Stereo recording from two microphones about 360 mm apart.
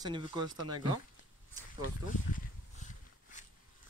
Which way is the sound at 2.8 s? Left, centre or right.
Left.